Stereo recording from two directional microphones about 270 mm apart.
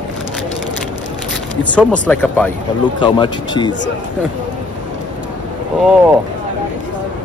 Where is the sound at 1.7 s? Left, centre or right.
Centre.